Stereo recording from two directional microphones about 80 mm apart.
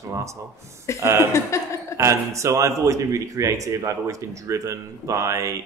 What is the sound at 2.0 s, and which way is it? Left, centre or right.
Speech, right.